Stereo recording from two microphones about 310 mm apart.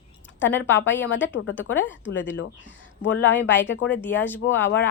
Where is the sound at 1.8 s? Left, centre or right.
Left.